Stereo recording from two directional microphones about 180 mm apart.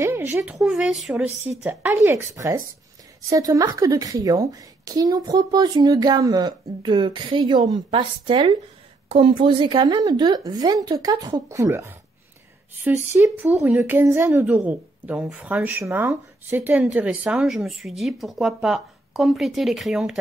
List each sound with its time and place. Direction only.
0.0 s a sound: 15° right (ahead or behind)
0.6 s speech: centre (ahead or behind)
1.2 s a woman's voice: 15° right (ahead or behind)